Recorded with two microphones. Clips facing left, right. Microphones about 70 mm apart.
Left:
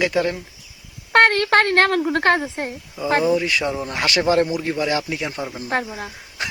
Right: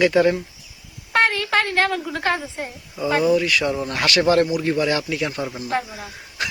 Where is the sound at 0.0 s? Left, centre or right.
Centre.